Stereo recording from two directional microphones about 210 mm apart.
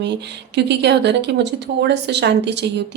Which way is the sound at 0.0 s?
55° right (ahead or behind).